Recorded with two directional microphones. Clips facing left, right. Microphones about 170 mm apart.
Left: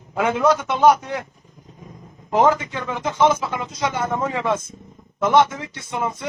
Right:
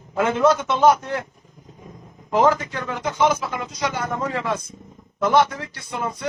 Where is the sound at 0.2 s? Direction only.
15° left (ahead or behind).